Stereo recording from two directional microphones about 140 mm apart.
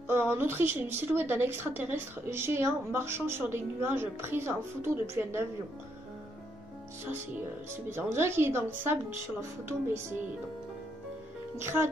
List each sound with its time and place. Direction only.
0.1 s a woman's voice: 15° right (ahead or behind)
7.7 s a woman's voice: 15° right (ahead or behind)
11.5 s a woman's voice: 15° right (ahead or behind)